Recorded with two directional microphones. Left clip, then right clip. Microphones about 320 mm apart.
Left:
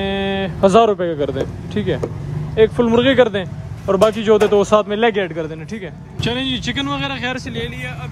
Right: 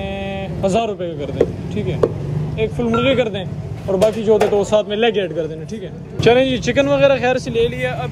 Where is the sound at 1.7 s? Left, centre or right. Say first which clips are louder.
Left 8 dB; left.